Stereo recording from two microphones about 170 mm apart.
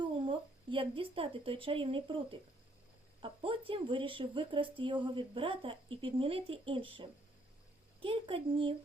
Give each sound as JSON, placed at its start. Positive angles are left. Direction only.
{"t": 0.0, "sound": "speech", "side_deg": -30}